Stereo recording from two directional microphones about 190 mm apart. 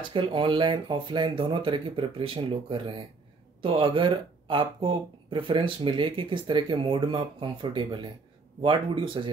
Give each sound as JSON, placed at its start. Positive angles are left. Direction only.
{"t": 0.1, "sound": "speech", "side_deg": -25}